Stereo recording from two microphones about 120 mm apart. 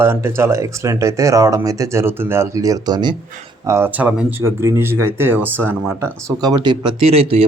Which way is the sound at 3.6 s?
25° right (ahead or behind).